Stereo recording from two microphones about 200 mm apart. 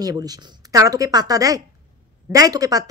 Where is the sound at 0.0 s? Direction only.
20° right (ahead or behind).